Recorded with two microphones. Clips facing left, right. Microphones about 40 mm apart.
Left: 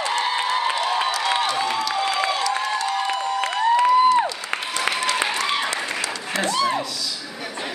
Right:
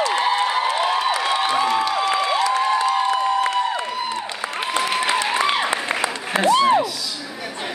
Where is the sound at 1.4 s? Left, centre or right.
Centre.